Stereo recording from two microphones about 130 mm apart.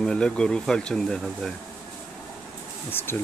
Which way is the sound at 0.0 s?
5° left (ahead or behind).